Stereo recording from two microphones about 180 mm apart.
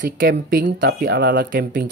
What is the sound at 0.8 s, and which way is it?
Speech, 70° right (ahead or behind).